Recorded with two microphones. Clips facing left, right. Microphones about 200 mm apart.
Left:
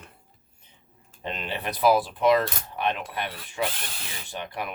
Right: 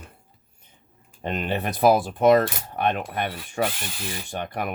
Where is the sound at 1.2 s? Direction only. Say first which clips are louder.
Right 5 dB; 50° right (ahead or behind).